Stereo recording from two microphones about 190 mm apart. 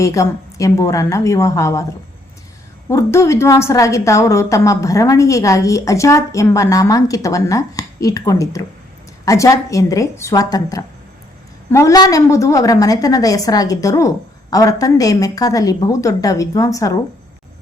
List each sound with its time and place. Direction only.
0.0 s a woman's voice: 15° left (ahead or behind)
2.9 s a woman's voice: 15° left (ahead or behind)